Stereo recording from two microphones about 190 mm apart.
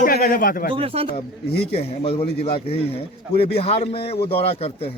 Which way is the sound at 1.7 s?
30° left (ahead or behind).